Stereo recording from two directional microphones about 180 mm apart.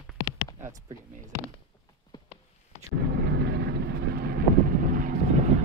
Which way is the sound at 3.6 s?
60° right (ahead or behind).